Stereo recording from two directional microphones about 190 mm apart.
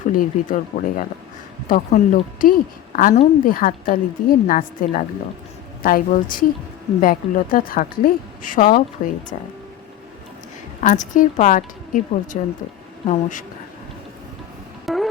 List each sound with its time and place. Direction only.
0.0 s a woman's voice: 45° left (ahead or behind)
10.8 s a woman's voice: 40° left (ahead or behind)
14.8 s music: centre (ahead or behind)